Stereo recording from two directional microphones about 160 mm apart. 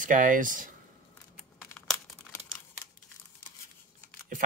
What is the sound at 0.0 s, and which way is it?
Speech, 55° right (ahead or behind).